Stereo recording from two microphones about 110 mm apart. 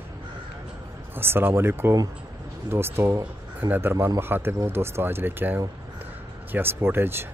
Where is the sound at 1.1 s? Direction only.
20° right (ahead or behind).